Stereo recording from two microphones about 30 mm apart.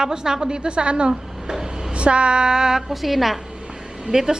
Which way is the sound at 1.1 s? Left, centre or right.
Right.